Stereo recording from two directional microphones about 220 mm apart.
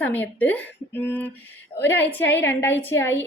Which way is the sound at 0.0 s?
5° left (ahead or behind).